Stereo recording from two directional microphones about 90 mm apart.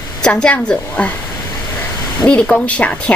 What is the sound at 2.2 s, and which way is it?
Speech, 15° left (ahead or behind).